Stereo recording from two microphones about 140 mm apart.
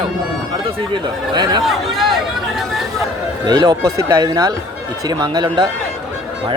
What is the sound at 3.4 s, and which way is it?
A man's voice, 30° right (ahead or behind).